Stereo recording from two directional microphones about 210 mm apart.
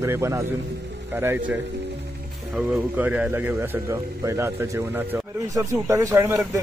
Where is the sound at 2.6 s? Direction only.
5° right (ahead or behind).